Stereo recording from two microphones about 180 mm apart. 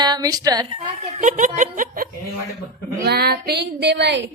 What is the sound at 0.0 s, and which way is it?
Speech, 20° right (ahead or behind).